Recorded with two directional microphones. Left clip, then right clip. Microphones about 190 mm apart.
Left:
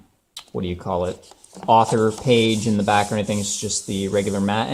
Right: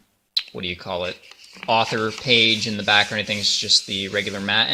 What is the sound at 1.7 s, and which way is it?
Speech, 20° right (ahead or behind).